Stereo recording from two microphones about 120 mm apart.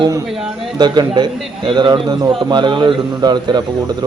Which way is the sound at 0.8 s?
40° right (ahead or behind).